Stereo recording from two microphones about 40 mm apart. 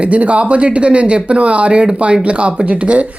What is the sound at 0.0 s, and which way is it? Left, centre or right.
Speech, right.